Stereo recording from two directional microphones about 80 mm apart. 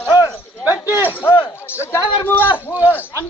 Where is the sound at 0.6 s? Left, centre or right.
Right.